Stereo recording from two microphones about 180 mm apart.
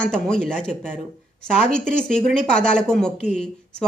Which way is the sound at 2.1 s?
5° left (ahead or behind).